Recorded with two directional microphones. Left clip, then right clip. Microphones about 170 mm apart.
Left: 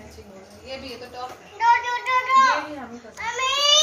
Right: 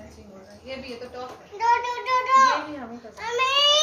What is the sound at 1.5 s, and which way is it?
Child singing, 90° right.